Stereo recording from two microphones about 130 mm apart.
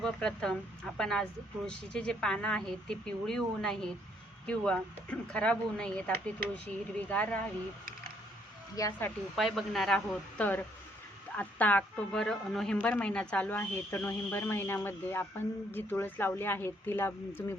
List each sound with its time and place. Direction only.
0.0 s speech: 5° left (ahead or behind)
8.8 s speech: 25° left (ahead or behind)
9.3 s speech: centre (ahead or behind); by 17.4 s 15° left (ahead or behind)